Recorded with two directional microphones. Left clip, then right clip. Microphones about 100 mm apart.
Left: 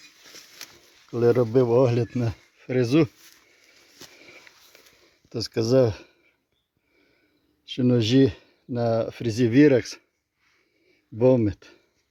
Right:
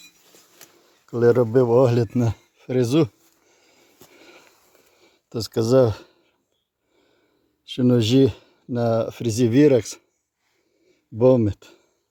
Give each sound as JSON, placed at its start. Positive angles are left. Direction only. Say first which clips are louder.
{"t": 1.1, "sound": "speech", "louder": "right 3 dB", "side_deg": -30}
{"t": 1.7, "sound": "speech", "louder": "right 3 dB", "side_deg": -40}
{"t": 2.6, "sound": "speech", "louder": "right 1 dB", "side_deg": -30}
{"t": 4.2, "sound": "sniff", "louder": "even", "side_deg": -30}
{"t": 5.3, "sound": "speech", "louder": "right 3 dB", "side_deg": -30}
{"t": 7.7, "sound": "speech", "louder": "right 3 dB", "side_deg": -30}